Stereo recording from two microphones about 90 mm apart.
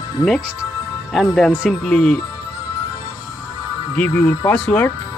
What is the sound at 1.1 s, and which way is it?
Speech, 5° right (ahead or behind).